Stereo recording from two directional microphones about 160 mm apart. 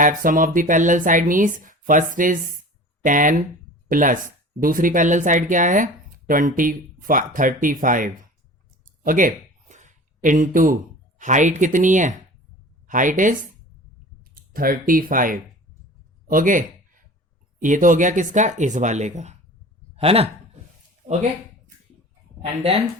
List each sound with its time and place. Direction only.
0.0 s speech: 60° right (ahead or behind)
8.8 s a sound: 55° right (ahead or behind)
11.2 s speech: 50° right (ahead or behind)
14.3 s speech: 65° right (ahead or behind)
16.3 s a sound: 55° right (ahead or behind)
17.6 s speech: 55° right (ahead or behind); by 20.3 s 40° right (ahead or behind)
22.4 s speech: 40° right (ahead or behind)